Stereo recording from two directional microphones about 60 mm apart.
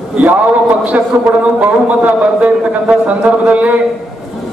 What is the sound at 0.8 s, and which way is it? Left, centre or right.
A man's voice, right.